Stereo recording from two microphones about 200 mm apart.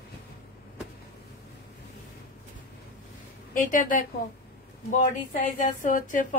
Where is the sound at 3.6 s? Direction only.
40° left (ahead or behind).